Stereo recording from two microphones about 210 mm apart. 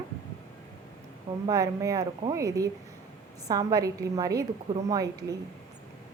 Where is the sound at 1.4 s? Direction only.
15° right (ahead or behind).